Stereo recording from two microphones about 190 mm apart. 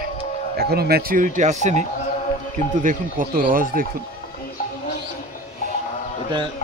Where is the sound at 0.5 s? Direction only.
55° right (ahead or behind).